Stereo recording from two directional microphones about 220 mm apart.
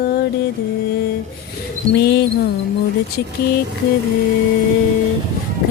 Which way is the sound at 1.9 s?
50° left (ahead or behind).